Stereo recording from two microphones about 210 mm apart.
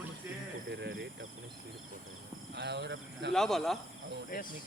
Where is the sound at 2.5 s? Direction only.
55° right (ahead or behind).